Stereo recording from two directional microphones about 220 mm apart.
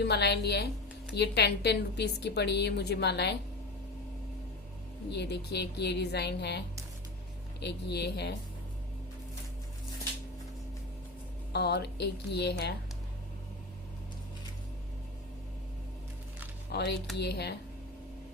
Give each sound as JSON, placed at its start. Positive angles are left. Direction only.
{"t": 0.0, "sound": "a woman's voice", "side_deg": 50}
{"t": 5.1, "sound": "a woman's voice", "side_deg": 50}
{"t": 7.6, "sound": "a woman's voice", "side_deg": 50}
{"t": 11.5, "sound": "a woman's voice", "side_deg": 50}
{"t": 16.7, "sound": "a woman's voice", "side_deg": 50}